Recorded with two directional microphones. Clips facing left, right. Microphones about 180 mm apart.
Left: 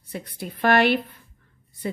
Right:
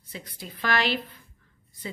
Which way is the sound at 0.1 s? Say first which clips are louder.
Left 7 dB; 60° left (ahead or behind).